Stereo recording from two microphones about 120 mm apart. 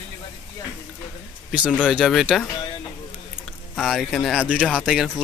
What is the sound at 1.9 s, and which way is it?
Speech, 5° right (ahead or behind).